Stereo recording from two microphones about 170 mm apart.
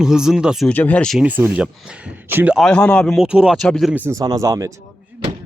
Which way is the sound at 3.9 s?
10° right (ahead or behind).